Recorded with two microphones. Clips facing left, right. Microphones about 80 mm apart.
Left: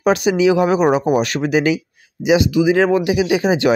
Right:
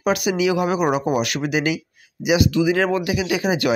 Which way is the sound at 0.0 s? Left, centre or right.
Left.